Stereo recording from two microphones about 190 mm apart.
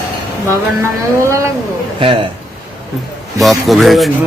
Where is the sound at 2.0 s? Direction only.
30° right (ahead or behind).